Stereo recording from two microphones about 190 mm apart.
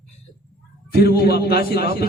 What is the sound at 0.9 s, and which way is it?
A man's voice, 55° left (ahead or behind).